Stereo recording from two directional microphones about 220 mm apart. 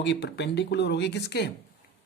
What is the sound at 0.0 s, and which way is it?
Speech, 50° left (ahead or behind).